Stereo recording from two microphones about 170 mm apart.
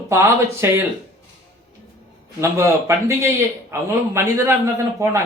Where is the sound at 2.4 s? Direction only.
15° right (ahead or behind).